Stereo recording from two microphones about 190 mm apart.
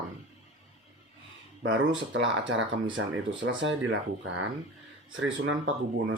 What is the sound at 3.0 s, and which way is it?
Speech, 90° right.